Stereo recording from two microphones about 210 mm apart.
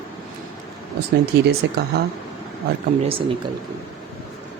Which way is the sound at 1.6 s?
55° right (ahead or behind).